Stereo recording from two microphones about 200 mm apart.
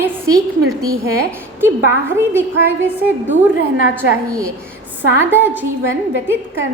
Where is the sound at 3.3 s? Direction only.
65° right (ahead or behind).